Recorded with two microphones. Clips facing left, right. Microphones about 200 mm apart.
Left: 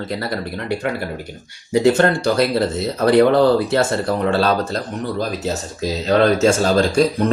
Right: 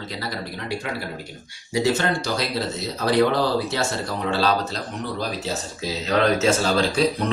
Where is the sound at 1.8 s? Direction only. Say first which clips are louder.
Left 7 dB; 55° left (ahead or behind).